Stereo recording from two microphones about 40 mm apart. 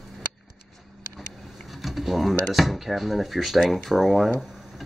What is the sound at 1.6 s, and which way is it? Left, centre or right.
Drawer open or close, centre.